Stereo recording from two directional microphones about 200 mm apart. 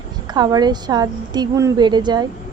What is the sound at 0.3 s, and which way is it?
A woman's voice, 20° right (ahead or behind).